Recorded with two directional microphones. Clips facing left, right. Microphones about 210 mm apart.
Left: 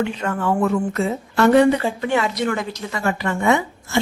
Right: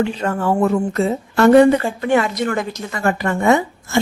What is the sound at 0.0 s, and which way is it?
Speech, 35° right (ahead or behind).